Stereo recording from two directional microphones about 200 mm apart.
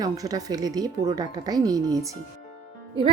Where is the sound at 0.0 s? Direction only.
20° right (ahead or behind).